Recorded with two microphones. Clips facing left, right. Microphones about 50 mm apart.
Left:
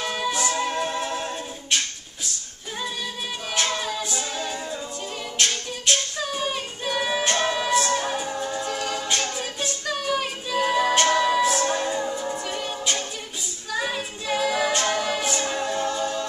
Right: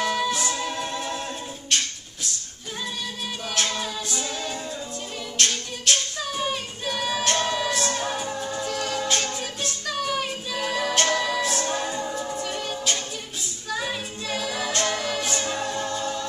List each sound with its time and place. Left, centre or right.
0.0 s a capella: centre
3.7 s a capella: centre
5.4 s singing: centre
9.2 s music: centre
11.8 s music: centre